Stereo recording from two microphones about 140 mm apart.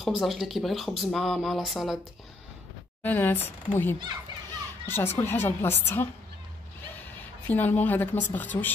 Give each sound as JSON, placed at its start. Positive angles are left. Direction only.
{"t": 0.0, "sound": "speech", "side_deg": 0}
{"t": 3.0, "sound": "speech", "side_deg": 15}